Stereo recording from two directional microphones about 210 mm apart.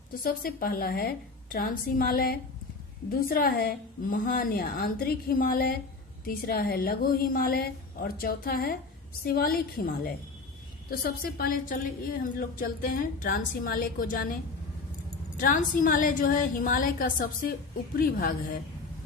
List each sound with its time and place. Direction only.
0.2 s a woman's voice: 45° left (ahead or behind)
15.4 s a woman's voice: 40° left (ahead or behind)